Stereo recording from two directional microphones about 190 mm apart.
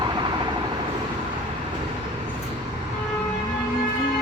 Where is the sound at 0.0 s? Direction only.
25° right (ahead or behind).